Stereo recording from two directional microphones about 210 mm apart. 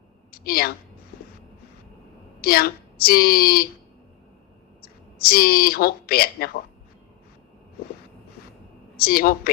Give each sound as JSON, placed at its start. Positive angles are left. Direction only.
{"t": 0.3, "sound": "a sound", "side_deg": 45}
{"t": 2.4, "sound": "a woman's voice", "side_deg": 45}
{"t": 4.8, "sound": "speech", "side_deg": 45}
{"t": 9.0, "sound": "a woman's voice", "side_deg": 45}